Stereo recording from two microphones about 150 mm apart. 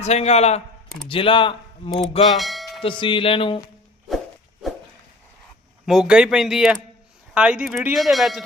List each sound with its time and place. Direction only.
0.0 s a man's voice: 45° left (ahead or behind)
2.2 s bell: centre (ahead or behind)
2.8 s speech: 35° left (ahead or behind)
5.8 s speech: 5° right (ahead or behind)